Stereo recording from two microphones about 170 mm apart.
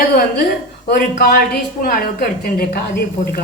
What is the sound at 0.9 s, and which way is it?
A woman's voice, 65° left (ahead or behind).